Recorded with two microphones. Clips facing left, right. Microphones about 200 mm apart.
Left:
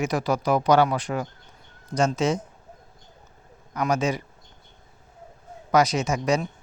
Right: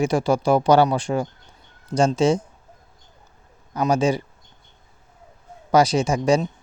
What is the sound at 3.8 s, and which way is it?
Speech, 30° right (ahead or behind).